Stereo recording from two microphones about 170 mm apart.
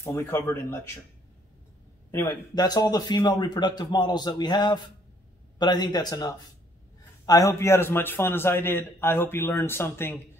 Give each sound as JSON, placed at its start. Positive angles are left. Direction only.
{"t": 0.0, "sound": "a man's voice", "side_deg": 15}
{"t": 2.0, "sound": "a man's voice", "side_deg": 20}